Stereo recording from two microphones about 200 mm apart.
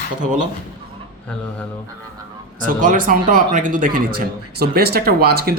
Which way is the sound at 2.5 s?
40° right (ahead or behind).